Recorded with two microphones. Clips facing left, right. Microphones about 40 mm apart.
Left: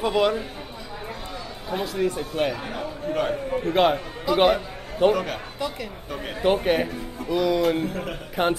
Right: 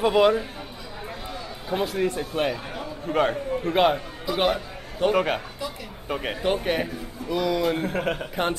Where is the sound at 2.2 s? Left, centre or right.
Centre.